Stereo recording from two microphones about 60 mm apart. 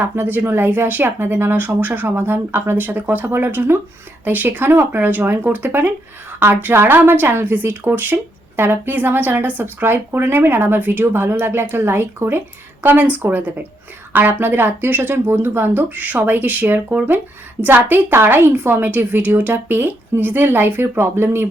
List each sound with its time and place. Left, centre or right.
0.0 s a woman's voice: right